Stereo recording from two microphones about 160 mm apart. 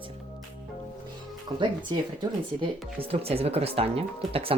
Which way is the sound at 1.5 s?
35° right (ahead or behind).